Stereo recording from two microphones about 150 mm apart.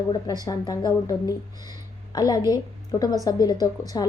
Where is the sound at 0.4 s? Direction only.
25° left (ahead or behind).